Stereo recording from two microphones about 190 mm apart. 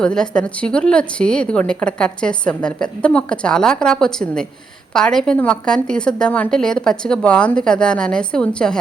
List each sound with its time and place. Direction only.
0.0 s a woman's voice: 5° left (ahead or behind)